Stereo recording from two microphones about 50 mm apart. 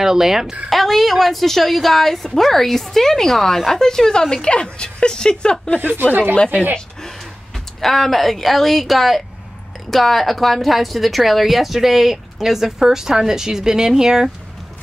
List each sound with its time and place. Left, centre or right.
0.0 s speech: centre
0.7 s a woman's voice: centre
5.8 s speech: right
7.0 s a woman's voice: centre